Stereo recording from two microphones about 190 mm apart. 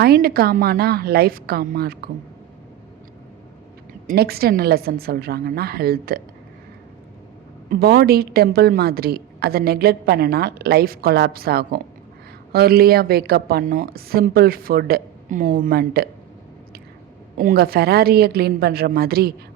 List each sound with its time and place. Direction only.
0.0 s a woman's voice: 55° right (ahead or behind)
4.0 s a woman's voice: 55° right (ahead or behind)
7.7 s a woman's voice: 55° right (ahead or behind)
17.3 s a woman's voice: 50° right (ahead or behind)